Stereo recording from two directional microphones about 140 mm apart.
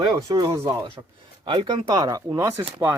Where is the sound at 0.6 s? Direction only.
40° right (ahead or behind).